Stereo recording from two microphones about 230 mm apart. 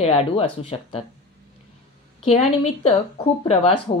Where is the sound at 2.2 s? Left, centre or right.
Left.